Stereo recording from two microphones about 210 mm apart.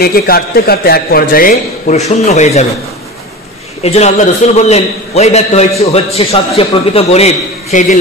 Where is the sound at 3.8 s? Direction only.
30° left (ahead or behind).